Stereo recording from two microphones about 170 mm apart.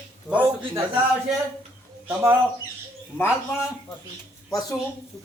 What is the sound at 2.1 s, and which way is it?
Speech, 15° right (ahead or behind).